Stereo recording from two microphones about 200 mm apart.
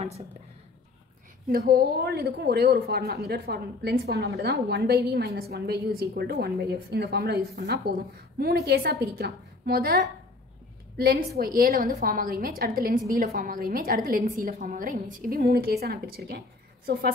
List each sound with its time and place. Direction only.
1.5 s a woman's voice: 50° right (ahead or behind)